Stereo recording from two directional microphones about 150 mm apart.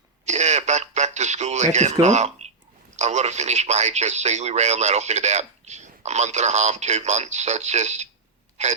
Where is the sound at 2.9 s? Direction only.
50° right (ahead or behind).